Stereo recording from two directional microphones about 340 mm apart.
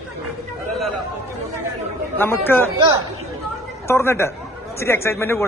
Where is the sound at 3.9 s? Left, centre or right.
Centre.